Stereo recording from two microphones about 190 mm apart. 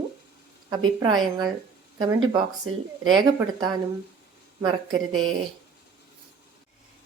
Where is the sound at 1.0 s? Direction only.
20° right (ahead or behind).